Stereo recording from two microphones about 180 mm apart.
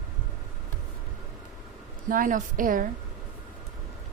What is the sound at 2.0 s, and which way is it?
Speech, 50° right (ahead or behind).